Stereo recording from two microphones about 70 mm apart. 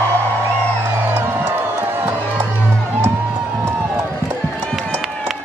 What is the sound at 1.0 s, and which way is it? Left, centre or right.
Music, right.